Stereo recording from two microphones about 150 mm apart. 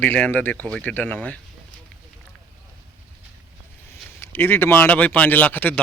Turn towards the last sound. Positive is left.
turn(degrees=10)  # may be behind; listen again after turning